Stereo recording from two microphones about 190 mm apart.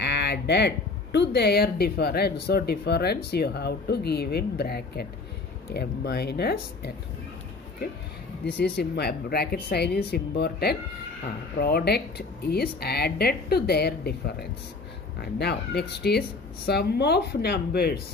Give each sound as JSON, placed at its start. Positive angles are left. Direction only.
{"t": 0.0, "sound": "speech", "side_deg": 65}
{"t": 8.5, "sound": "speech", "side_deg": 60}